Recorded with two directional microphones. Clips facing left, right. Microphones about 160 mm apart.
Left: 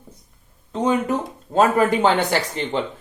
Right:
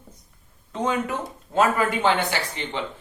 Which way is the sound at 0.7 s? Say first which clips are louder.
Left 5 dB; 35° left (ahead or behind).